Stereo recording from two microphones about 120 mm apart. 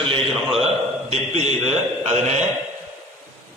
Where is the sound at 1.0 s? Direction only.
65° right (ahead or behind).